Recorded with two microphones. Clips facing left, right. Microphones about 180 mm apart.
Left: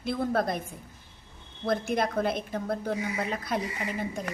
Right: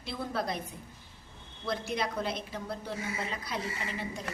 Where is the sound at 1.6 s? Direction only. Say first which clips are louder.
Left 6 dB; 50° left (ahead or behind).